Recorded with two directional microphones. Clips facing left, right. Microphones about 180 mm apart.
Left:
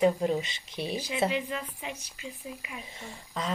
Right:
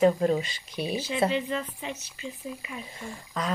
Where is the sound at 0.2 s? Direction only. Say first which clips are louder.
Right 3 dB; 20° left (ahead or behind).